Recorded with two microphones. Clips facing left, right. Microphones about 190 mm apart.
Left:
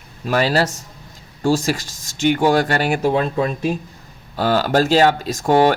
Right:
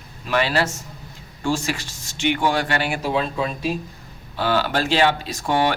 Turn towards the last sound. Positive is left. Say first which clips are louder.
# left 6 dB
turn(degrees=45)  # may be behind; listen again after turning